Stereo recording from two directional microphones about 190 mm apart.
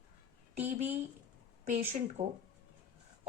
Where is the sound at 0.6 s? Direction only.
35° right (ahead or behind).